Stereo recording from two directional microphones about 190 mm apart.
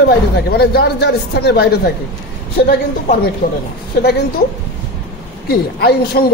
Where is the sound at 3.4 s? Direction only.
50° left (ahead or behind).